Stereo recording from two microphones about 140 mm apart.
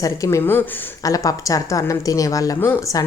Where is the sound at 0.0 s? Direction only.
20° left (ahead or behind).